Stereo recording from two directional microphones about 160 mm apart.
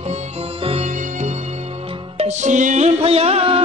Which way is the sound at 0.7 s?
40° right (ahead or behind).